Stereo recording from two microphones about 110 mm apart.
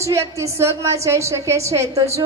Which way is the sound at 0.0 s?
25° right (ahead or behind).